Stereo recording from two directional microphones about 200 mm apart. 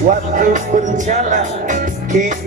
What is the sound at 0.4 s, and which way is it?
Music, 40° right (ahead or behind).